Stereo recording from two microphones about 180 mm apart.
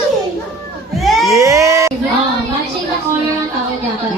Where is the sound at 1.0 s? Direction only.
Centre (ahead or behind).